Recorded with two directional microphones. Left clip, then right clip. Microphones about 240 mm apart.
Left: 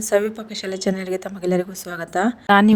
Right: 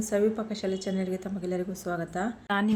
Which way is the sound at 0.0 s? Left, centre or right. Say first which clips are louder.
Left 7 dB; left.